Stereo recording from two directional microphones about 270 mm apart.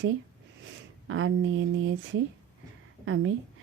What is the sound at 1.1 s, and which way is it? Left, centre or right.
A woman's voice, right.